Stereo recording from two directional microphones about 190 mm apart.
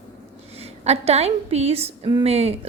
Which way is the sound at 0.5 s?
35° right (ahead or behind).